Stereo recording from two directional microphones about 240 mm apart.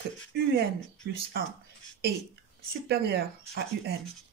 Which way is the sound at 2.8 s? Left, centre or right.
Right.